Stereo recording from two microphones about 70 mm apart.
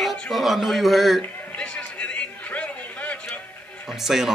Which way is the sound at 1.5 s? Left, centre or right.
Centre.